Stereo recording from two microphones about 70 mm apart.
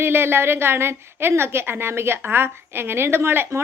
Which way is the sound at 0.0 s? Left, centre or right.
Right.